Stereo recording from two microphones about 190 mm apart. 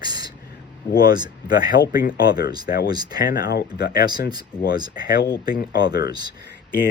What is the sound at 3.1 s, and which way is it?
Speech, 50° left (ahead or behind).